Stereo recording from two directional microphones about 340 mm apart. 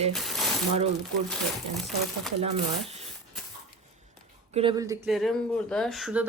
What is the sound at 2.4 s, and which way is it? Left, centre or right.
Speech, centre.